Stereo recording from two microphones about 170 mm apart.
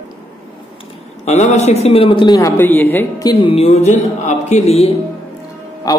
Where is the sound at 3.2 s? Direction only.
25° left (ahead or behind).